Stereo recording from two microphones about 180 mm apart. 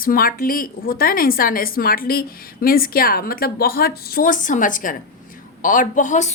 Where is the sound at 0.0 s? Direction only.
55° left (ahead or behind).